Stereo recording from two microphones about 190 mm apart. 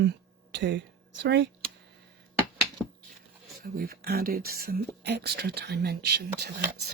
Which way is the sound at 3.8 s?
50° right (ahead or behind).